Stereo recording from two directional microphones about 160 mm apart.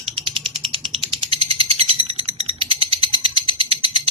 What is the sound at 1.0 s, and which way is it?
Bird, 35° right (ahead or behind).